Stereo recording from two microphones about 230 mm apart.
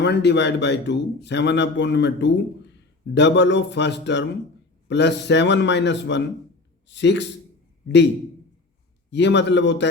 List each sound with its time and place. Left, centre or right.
0.0 s a man's voice: left
9.0 s a man's voice: left